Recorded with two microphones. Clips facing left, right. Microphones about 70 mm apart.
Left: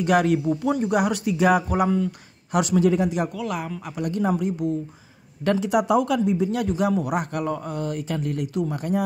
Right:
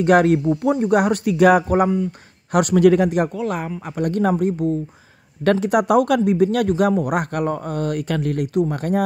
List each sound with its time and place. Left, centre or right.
0.0 s speech: right
3.3 s speech: right